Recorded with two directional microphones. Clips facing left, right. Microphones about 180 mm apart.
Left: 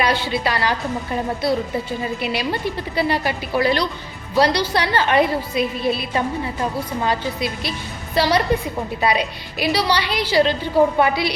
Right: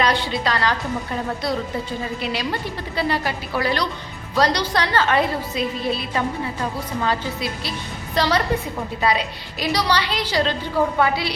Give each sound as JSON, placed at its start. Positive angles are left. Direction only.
{"t": 0.0, "sound": "a woman's voice", "side_deg": 10}
{"t": 2.2, "sound": "a woman's voice", "side_deg": 15}
{"t": 8.1, "sound": "a woman's voice", "side_deg": 10}